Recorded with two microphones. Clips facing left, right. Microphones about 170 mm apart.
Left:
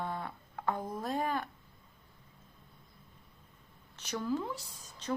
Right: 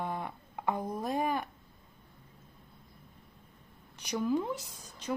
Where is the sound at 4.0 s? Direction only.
15° right (ahead or behind).